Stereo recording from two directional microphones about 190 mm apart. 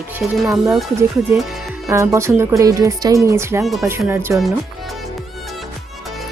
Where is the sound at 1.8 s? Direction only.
15° right (ahead or behind).